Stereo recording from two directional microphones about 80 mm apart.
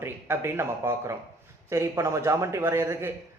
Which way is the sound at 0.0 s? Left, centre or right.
Right.